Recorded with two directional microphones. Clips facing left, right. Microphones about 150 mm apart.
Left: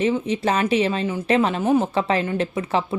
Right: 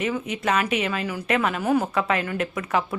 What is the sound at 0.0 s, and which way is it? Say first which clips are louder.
Speech: left 5 dB; 30° left (ahead or behind).